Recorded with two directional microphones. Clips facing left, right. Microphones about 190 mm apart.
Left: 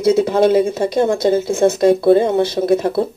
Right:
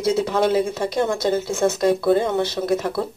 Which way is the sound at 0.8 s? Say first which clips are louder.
Left 6 dB; 30° left (ahead or behind).